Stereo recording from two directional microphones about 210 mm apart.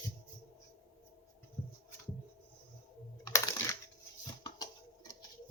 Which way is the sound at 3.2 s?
15° left (ahead or behind).